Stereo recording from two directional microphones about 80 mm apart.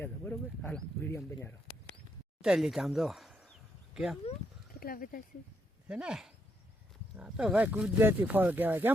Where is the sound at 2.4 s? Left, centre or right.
Centre.